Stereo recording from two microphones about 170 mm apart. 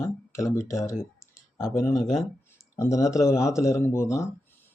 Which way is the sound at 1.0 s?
15° left (ahead or behind).